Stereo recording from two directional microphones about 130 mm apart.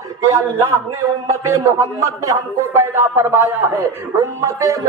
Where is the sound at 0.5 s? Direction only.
20° right (ahead or behind).